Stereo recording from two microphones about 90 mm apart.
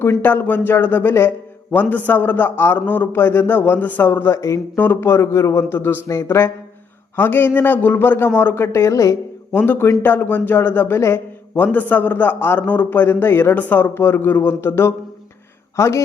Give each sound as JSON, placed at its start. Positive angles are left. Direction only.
{"t": 0.0, "sound": "a man's voice", "side_deg": 25}
{"t": 4.8, "sound": "a man's voice", "side_deg": 25}
{"t": 9.6, "sound": "a man's voice", "side_deg": 25}